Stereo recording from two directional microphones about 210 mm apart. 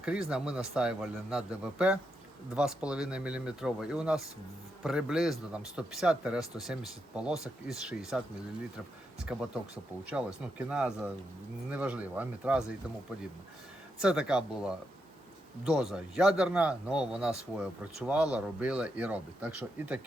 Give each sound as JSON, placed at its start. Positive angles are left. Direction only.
{"t": 0.0, "sound": "a man's voice", "side_deg": -5}
{"t": 9.3, "sound": "a man's voice", "side_deg": 0}
{"t": 14.0, "sound": "a man's voice", "side_deg": -5}